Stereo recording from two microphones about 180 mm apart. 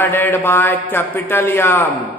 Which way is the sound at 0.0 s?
10° left (ahead or behind).